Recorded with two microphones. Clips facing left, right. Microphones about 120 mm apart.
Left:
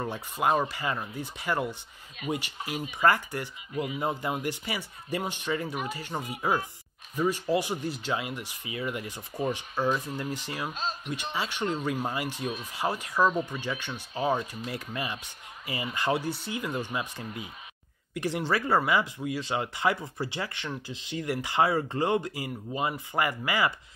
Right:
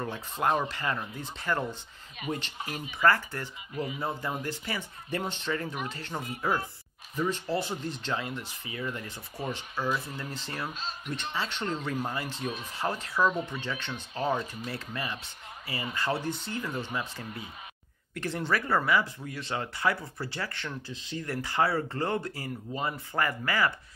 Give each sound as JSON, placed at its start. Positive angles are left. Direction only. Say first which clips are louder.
{"t": 0.0, "sound": "speech", "louder": "left 1 dB", "side_deg": 10}
{"t": 10.7, "sound": "speech", "louder": "left 5 dB", "side_deg": 45}
{"t": 11.1, "sound": "speech", "louder": "right 1 dB", "side_deg": 10}